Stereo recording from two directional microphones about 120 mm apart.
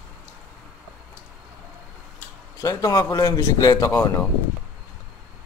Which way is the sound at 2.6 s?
30° left (ahead or behind).